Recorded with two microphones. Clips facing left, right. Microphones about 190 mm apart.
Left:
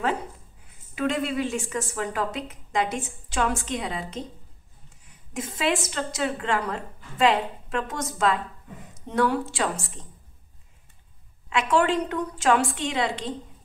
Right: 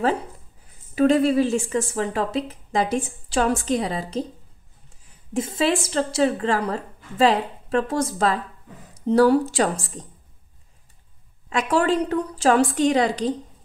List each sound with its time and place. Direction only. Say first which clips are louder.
0.9 s a woman's voice: right 9 dB; 35° right (ahead or behind)
5.3 s a woman's voice: right 5 dB; 30° right (ahead or behind)
11.4 s a woman's voice: right 2 dB; 40° right (ahead or behind)